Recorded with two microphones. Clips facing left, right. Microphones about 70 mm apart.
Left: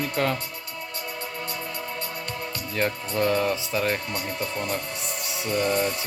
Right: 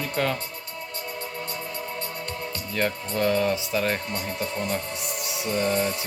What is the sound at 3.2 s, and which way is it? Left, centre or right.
Speech, left.